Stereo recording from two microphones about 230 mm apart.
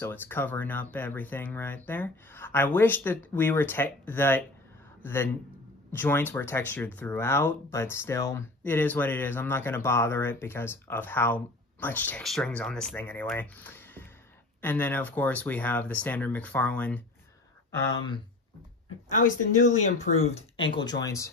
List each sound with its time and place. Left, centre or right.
0.0 s a man's voice: centre
19.1 s speech: left; by 21.3 s centre